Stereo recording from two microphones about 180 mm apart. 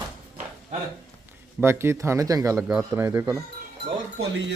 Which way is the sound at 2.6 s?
5° right (ahead or behind).